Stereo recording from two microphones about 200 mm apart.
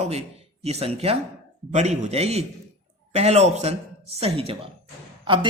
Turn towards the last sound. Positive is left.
turn(degrees=-25)  # may be behind; listen again after turning